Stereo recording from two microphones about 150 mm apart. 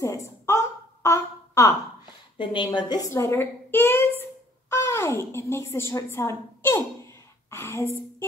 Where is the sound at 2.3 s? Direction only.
30° left (ahead or behind).